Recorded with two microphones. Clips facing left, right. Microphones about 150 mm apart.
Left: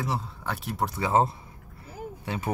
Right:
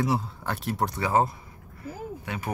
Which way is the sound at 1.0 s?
30° left (ahead or behind).